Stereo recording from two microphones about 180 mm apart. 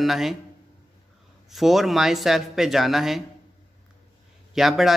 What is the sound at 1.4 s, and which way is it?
A man's voice, centre (ahead or behind).